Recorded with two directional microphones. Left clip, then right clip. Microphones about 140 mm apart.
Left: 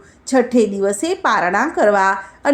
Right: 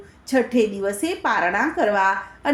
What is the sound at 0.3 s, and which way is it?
A woman's voice, 40° left (ahead or behind).